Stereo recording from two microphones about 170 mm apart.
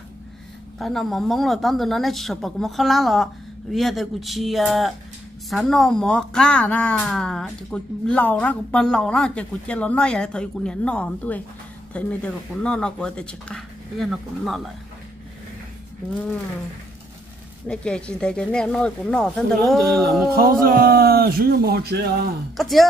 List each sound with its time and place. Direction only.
0.7 s speech: centre (ahead or behind)
17.6 s speech: 5° left (ahead or behind)
20.3 s speech: 60° right (ahead or behind)
22.6 s speech: centre (ahead or behind)